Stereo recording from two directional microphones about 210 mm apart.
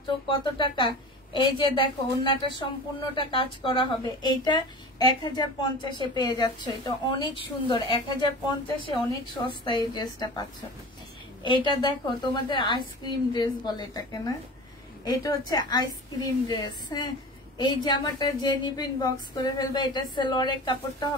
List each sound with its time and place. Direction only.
0.3 s speech: 20° left (ahead or behind)
11.4 s speech: 20° left (ahead or behind)